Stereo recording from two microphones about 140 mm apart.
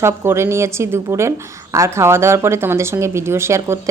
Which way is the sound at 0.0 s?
20° right (ahead or behind).